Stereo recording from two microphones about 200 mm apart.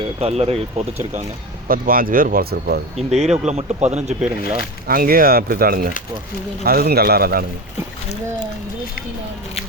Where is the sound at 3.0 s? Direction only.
35° right (ahead or behind).